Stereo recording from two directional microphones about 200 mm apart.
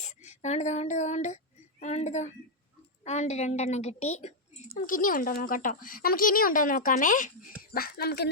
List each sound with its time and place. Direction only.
0.0 s a woman's voice: 35° left (ahead or behind); by 8.3 s 50° left (ahead or behind)